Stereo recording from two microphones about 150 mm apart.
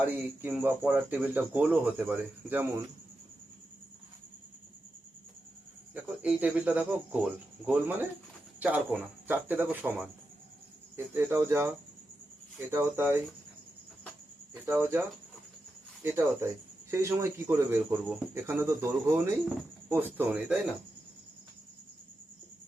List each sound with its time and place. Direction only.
0.0 s speech: 10° right (ahead or behind)
5.9 s speech: 10° right (ahead or behind)
14.7 s speech: 15° right (ahead or behind)
16.0 s speech: 15° right (ahead or behind)